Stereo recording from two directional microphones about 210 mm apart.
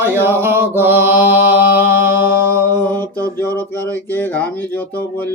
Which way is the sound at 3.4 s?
10° left (ahead or behind).